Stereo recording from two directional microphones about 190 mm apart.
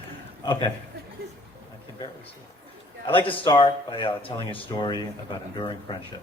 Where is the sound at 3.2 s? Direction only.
25° left (ahead or behind).